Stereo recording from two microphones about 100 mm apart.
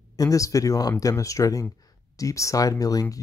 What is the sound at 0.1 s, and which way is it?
Speech, 35° left (ahead or behind).